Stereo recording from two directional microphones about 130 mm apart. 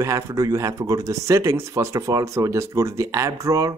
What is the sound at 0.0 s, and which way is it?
Speech, 25° right (ahead or behind).